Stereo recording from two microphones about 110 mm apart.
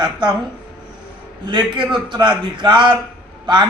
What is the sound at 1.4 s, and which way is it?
A man's voice, 45° right (ahead or behind).